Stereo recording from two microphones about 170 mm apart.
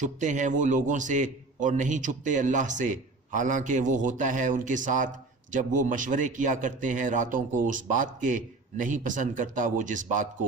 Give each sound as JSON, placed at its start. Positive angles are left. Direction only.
{"t": 0.0, "sound": "a man's voice", "side_deg": -45}